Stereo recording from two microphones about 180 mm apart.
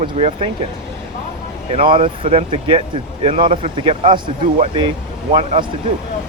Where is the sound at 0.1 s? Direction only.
35° right (ahead or behind).